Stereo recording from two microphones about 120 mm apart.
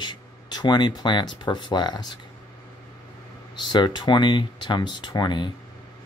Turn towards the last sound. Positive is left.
turn(degrees=40)  # may be behind; listen again after turning